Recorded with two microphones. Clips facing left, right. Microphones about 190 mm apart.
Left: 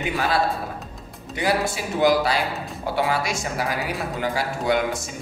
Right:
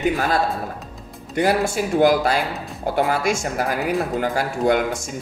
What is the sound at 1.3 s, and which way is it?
Speech, 50° right (ahead or behind).